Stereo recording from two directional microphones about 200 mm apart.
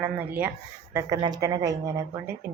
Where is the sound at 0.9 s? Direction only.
20° right (ahead or behind).